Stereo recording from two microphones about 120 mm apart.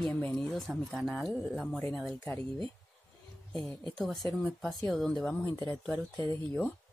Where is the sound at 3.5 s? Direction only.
5° left (ahead or behind).